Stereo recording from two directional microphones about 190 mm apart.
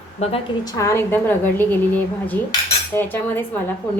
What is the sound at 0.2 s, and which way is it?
Speech, 30° left (ahead or behind).